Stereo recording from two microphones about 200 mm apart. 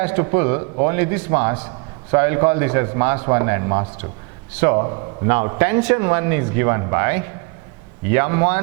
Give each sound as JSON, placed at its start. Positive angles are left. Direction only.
{"t": 0.0, "sound": "a man's voice", "side_deg": -15}
{"t": 1.5, "sound": "a sound", "side_deg": -30}
{"t": 2.1, "sound": "a man's voice", "side_deg": -20}